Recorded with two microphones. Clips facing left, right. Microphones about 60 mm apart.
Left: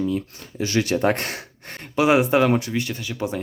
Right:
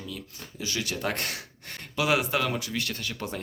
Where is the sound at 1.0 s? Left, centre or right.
Left.